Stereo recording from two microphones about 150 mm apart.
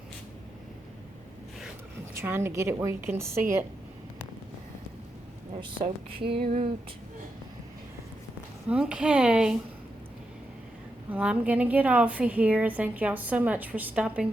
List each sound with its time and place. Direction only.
2.1 s a woman's voice: 15° right (ahead or behind)
5.5 s speech: 35° right (ahead or behind)
8.7 s a woman's voice: 5° right (ahead or behind)
11.1 s a woman's voice: 10° right (ahead or behind)